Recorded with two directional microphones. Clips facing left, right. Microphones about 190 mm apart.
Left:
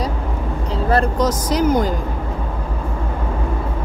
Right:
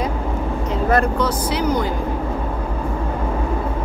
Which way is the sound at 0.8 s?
35° left (ahead or behind).